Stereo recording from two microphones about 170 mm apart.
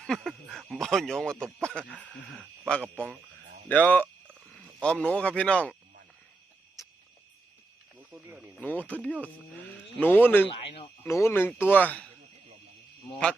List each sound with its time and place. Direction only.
0.0 s speech: centre (ahead or behind)
1.4 s speech: 10° right (ahead or behind)
2.6 s speech: 5° left (ahead or behind)
6.8 s cricket: 20° left (ahead or behind)
8.5 s speech: 10° left (ahead or behind)